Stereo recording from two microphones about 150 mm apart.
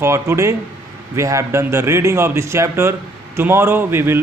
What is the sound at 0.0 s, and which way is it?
A man's voice, 20° right (ahead or behind).